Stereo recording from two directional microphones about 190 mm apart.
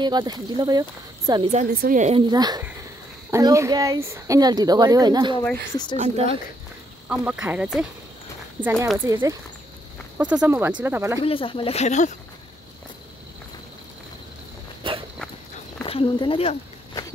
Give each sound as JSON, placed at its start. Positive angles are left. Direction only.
{"t": 0.0, "sound": "a woman's voice", "side_deg": -20}
{"t": 1.8, "sound": "speech", "side_deg": -45}
{"t": 2.3, "sound": "a woman's voice", "side_deg": -20}
{"t": 5.4, "sound": "speech", "side_deg": 10}
{"t": 5.9, "sound": "speech", "side_deg": -35}
{"t": 7.1, "sound": "speech", "side_deg": -10}
{"t": 8.9, "sound": "speech", "side_deg": -15}
{"t": 11.1, "sound": "speech", "side_deg": 30}
{"t": 14.8, "sound": "walk", "side_deg": -25}
{"t": 15.8, "sound": "a sound", "side_deg": 30}